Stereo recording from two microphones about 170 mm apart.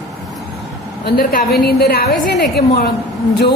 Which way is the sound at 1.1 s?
65° left (ahead or behind).